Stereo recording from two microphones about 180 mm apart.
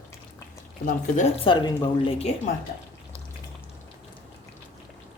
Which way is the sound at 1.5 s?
25° left (ahead or behind).